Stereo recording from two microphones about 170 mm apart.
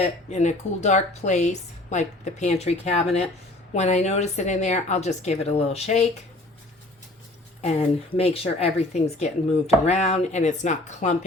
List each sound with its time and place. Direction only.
0.3 s a woman's voice: 40° left (ahead or behind)
7.6 s speech: 40° left (ahead or behind)